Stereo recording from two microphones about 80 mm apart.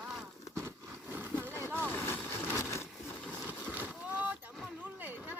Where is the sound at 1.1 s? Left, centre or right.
Right.